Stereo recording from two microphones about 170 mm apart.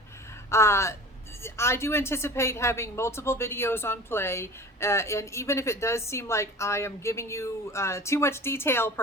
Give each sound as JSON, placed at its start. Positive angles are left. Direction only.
{"t": 0.5, "sound": "a woman's voice", "side_deg": 15}